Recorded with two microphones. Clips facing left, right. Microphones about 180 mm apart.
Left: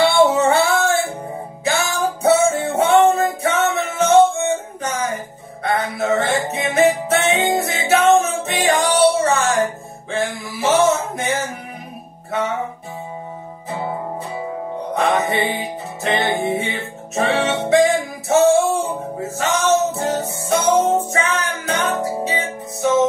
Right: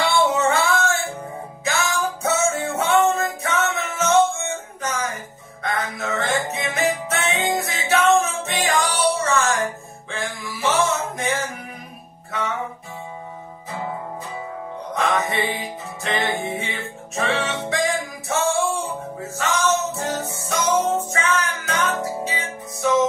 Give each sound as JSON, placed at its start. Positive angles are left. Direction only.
{"t": 0.1, "sound": "music", "side_deg": 35}
{"t": 13.7, "sound": "music", "side_deg": 35}